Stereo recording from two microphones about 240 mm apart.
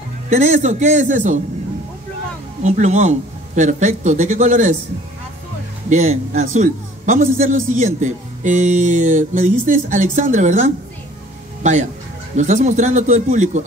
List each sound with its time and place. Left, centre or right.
0.3 s speech: right
2.6 s a man's voice: right
5.9 s a man's voice: right